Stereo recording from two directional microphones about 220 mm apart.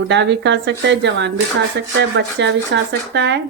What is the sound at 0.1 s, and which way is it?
Speech, 55° right (ahead or behind).